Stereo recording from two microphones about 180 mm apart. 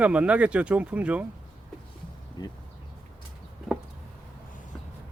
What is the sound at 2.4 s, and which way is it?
Speech, 25° left (ahead or behind).